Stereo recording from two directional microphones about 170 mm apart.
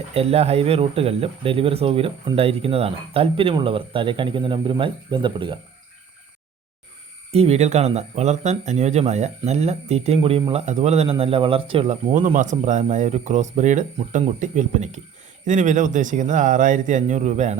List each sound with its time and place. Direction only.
0.1 s speech: 35° right (ahead or behind)
7.3 s speech: 35° right (ahead or behind)